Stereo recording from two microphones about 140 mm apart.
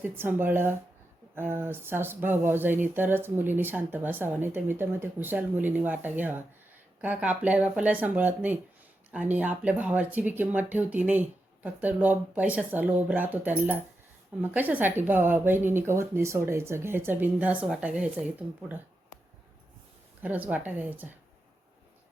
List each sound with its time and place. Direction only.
0.0 s speech: 15° right (ahead or behind)
20.2 s speech: 10° right (ahead or behind)